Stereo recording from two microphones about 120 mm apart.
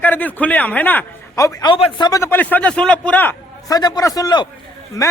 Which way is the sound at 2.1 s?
25° left (ahead or behind).